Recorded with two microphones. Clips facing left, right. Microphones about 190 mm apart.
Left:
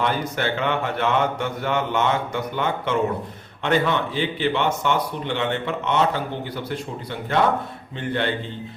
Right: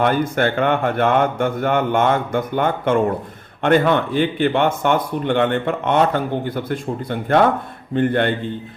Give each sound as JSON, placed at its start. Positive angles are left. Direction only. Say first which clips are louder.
{"t": 0.0, "sound": "speech", "louder": "right 6 dB", "side_deg": -55}